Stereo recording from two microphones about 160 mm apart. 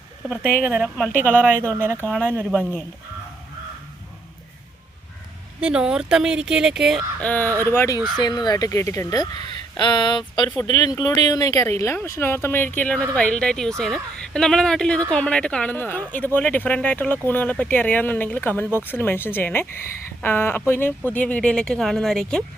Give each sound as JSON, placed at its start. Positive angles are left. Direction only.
{"t": 0.7, "sound": "a woman's voice", "side_deg": -5}
{"t": 2.0, "sound": "a woman's voice", "side_deg": 0}
{"t": 5.5, "sound": "a woman's voice", "side_deg": -5}
{"t": 7.2, "sound": "a woman's voice", "side_deg": 10}